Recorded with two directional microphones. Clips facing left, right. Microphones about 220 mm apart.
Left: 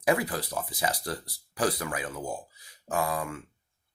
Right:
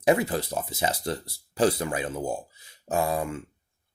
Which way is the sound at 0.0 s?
25° right (ahead or behind).